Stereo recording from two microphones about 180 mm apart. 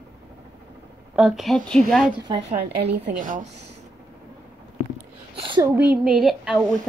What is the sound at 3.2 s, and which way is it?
Speech, 50° right (ahead or behind).